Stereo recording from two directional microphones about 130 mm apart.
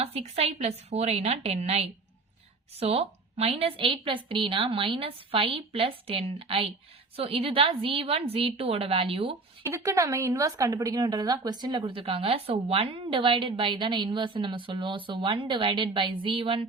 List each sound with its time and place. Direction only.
0.0 s a woman's voice: 50° right (ahead or behind)
9.6 s speech: 25° right (ahead or behind); by 16.6 s 45° right (ahead or behind)